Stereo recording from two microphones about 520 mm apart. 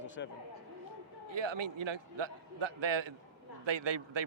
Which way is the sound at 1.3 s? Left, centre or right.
Right.